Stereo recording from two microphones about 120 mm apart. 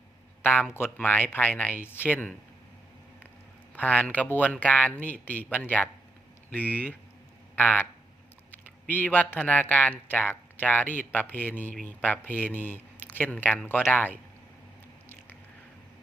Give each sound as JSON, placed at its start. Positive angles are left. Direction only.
{"t": 0.7, "sound": "speech", "side_deg": 15}
{"t": 3.8, "sound": "speech", "side_deg": 10}
{"t": 8.9, "sound": "speech", "side_deg": 15}